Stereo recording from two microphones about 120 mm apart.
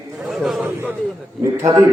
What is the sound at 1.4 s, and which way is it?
Speech, 30° right (ahead or behind).